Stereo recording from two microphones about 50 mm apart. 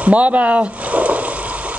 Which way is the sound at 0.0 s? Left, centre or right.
Right.